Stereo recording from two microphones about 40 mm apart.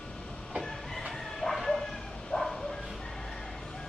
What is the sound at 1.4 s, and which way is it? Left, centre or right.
Bow-wow, centre.